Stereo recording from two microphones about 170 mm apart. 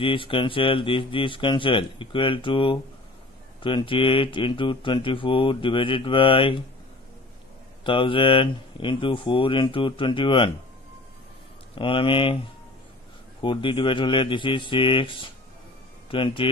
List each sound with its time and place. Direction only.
0.0 s speech: 30° left (ahead or behind)
7.8 s speech: 30° left (ahead or behind)
11.7 s speech: 30° left (ahead or behind)
13.4 s speech: 30° left (ahead or behind)